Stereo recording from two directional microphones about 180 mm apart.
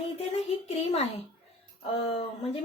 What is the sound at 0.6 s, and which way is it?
Speech, 35° left (ahead or behind).